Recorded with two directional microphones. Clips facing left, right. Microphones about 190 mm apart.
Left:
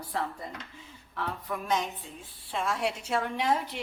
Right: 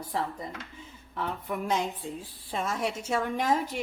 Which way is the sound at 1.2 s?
20° right (ahead or behind).